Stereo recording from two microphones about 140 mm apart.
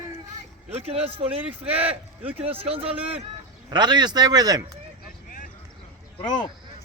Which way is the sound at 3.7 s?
30° right (ahead or behind).